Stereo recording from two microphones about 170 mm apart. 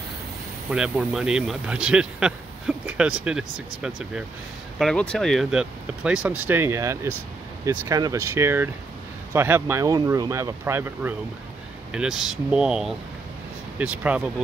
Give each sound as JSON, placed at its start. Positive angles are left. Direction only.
{"t": 0.7, "sound": "speech", "side_deg": -5}